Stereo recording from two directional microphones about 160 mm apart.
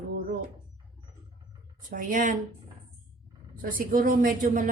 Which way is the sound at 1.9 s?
55° right (ahead or behind).